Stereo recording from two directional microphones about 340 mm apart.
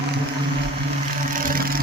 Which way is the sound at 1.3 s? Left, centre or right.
Right.